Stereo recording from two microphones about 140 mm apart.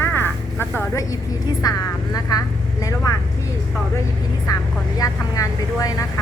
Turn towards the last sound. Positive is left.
turn(degrees=25)  # may be behind; listen again after turning